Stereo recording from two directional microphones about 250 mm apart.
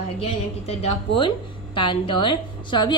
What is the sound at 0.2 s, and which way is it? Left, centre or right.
A woman's voice, left.